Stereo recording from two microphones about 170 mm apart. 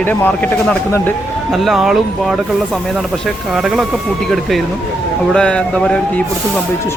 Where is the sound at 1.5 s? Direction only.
Centre (ahead or behind).